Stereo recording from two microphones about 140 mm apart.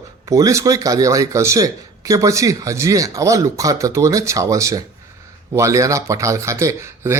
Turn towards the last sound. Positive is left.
turn(degrees=-20)  # may be behind; listen again after turning